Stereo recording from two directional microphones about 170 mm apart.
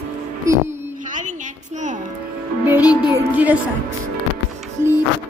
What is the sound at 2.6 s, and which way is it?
Speech, 10° right (ahead or behind).